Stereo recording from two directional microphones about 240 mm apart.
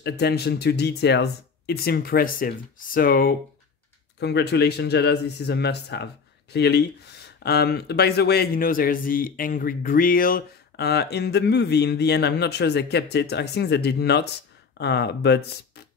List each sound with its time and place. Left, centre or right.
0.0 s speech: left